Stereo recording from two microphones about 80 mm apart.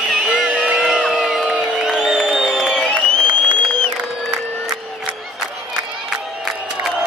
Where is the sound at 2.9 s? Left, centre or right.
Right.